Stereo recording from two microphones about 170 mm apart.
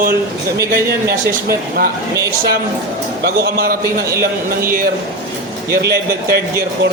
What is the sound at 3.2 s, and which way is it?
Speech, 65° right (ahead or behind).